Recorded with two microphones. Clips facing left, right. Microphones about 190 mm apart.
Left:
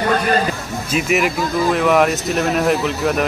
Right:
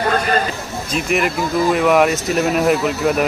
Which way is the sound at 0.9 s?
Centre (ahead or behind).